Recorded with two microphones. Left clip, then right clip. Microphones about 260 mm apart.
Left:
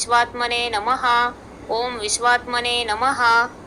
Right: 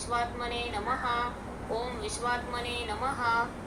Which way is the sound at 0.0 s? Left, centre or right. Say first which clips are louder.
Left 13 dB; left.